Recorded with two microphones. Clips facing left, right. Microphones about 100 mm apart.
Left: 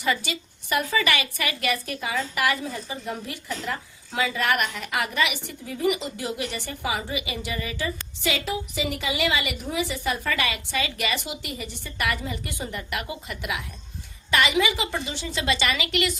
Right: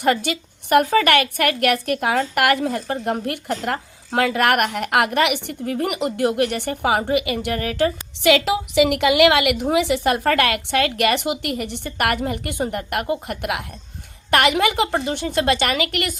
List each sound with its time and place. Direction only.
0.0 s a woman's voice: 55° right (ahead or behind)